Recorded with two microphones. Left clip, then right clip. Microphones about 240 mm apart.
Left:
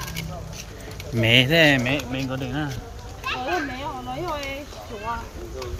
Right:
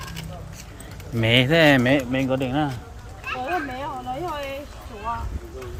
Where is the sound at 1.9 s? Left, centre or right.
Right.